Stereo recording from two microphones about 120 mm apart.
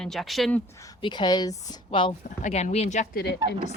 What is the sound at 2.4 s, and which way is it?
Speech, 65° left (ahead or behind).